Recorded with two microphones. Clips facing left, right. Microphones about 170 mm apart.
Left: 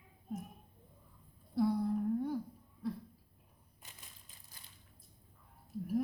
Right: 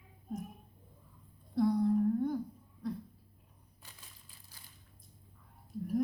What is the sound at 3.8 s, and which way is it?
Crushing, 20° left (ahead or behind).